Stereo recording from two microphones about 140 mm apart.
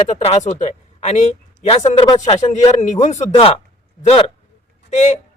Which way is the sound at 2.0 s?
40° left (ahead or behind).